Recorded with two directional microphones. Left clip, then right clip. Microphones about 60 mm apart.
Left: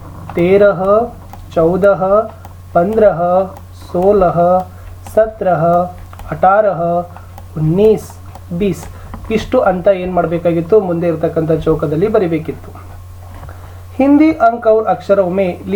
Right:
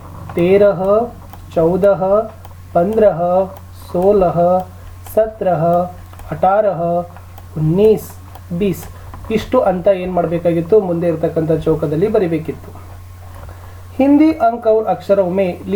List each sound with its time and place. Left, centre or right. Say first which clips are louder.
0.3 s speech: left 2 dB; centre
14.0 s speech: left 2 dB; right